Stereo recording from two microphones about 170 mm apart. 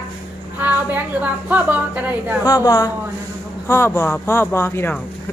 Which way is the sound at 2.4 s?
20° left (ahead or behind).